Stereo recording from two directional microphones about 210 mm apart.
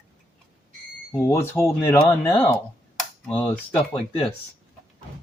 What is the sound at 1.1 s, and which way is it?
Speech, 10° left (ahead or behind).